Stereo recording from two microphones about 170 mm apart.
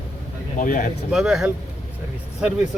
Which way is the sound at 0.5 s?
50° left (ahead or behind).